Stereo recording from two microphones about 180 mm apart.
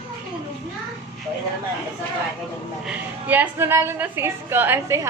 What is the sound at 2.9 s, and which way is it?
A woman's voice, 10° right (ahead or behind).